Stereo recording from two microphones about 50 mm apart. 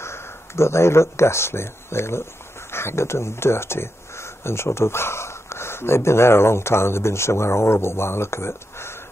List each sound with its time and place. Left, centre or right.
0.0 s speech: left